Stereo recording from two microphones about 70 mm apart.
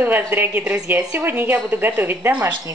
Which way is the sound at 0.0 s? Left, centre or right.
Right.